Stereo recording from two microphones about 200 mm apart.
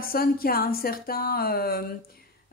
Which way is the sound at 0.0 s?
45° left (ahead or behind).